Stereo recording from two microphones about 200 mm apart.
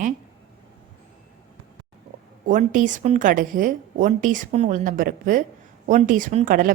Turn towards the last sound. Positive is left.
turn(degrees=-45)  # may be behind; listen again after turning